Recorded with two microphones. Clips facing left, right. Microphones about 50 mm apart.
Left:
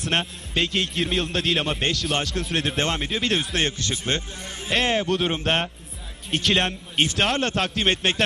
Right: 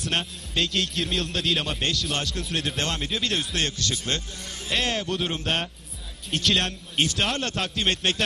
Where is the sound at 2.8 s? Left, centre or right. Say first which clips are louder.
Left 3 dB; left.